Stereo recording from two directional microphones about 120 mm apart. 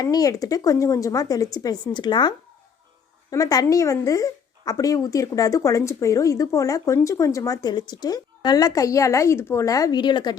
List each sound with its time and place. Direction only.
0.0 s a woman's voice: 30° left (ahead or behind)